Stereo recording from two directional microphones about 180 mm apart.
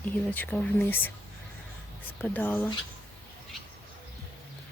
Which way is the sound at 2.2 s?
10° left (ahead or behind).